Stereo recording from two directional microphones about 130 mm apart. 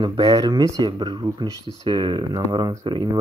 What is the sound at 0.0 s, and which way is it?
Speech, 30° right (ahead or behind).